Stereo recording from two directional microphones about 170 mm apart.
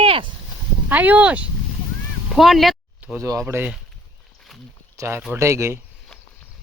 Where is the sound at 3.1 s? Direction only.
20° right (ahead or behind).